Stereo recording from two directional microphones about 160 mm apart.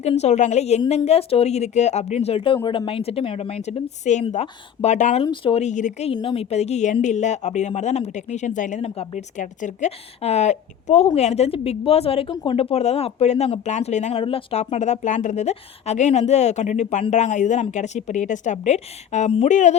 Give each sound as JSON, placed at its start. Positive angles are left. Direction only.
{"t": 0.0, "sound": "speech", "side_deg": 40}
{"t": 5.2, "sound": "speech", "side_deg": 30}
{"t": 5.6, "sound": "speech", "side_deg": 50}
{"t": 6.1, "sound": "speech", "side_deg": 35}